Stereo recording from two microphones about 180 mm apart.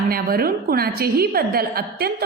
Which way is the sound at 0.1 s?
55° right (ahead or behind).